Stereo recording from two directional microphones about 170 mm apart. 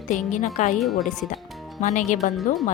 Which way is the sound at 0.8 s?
Centre (ahead or behind).